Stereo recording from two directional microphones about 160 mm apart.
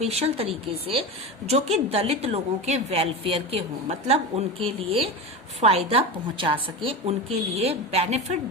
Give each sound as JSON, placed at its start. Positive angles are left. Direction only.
{"t": 0.0, "sound": "a woman's voice", "side_deg": -40}
{"t": 1.5, "sound": "a woman's voice", "side_deg": -40}